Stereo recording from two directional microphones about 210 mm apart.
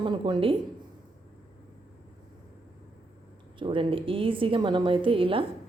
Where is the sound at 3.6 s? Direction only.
25° right (ahead or behind).